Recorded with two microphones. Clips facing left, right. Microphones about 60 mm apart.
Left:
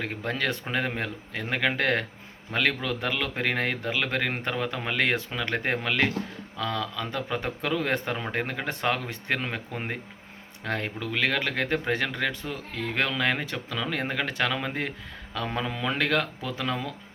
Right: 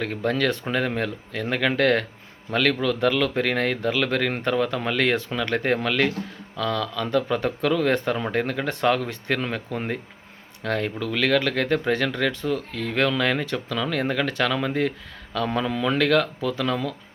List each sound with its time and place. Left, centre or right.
0.3 s speech: centre